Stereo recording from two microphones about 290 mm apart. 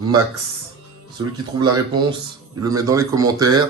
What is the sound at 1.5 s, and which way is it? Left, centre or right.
Speech, centre.